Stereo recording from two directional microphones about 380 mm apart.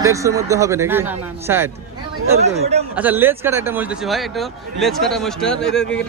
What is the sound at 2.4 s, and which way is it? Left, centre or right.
Speech, centre.